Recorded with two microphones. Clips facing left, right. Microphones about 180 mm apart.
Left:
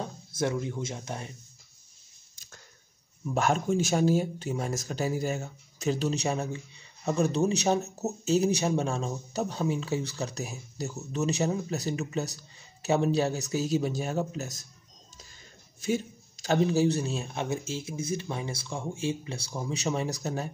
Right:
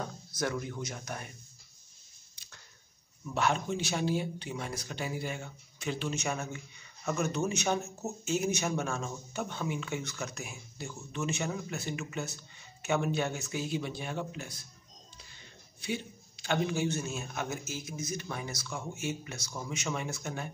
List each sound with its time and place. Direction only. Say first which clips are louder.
0.0 s speech: left 4 dB; 25° left (ahead or behind)
2.3 s a sound: left 4 dB; 45° left (ahead or behind)
3.3 s speech: left 5 dB; 45° left (ahead or behind)
15.8 s speech: left 7 dB; 40° left (ahead or behind)